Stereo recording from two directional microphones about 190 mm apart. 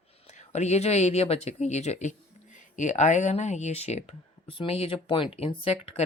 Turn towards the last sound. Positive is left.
turn(degrees=30)  # may be behind; listen again after turning